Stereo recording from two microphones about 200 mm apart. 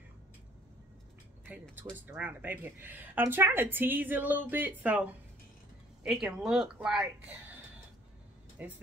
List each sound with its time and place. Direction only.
1.5 s speech: 10° right (ahead or behind)
8.5 s speech: 10° right (ahead or behind)